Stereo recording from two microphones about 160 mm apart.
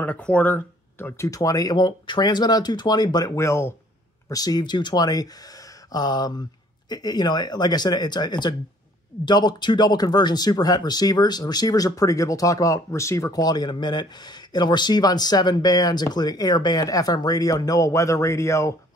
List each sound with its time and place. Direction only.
0.0 s speech: 10° left (ahead or behind)